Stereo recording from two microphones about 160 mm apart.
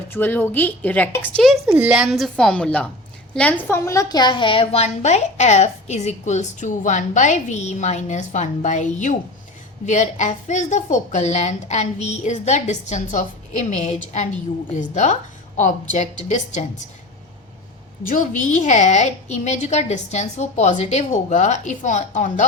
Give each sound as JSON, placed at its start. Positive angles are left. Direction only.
{"t": 0.1, "sound": "a woman's voice", "side_deg": 10}
{"t": 1.4, "sound": "a woman's voice", "side_deg": 0}
{"t": 18.1, "sound": "a woman's voice", "side_deg": 55}